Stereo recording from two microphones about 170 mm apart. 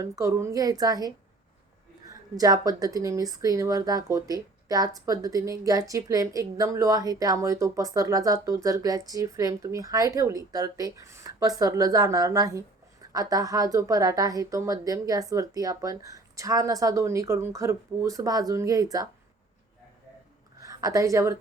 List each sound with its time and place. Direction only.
0.0 s speech: 15° right (ahead or behind)
20.6 s a woman's voice: 20° right (ahead or behind)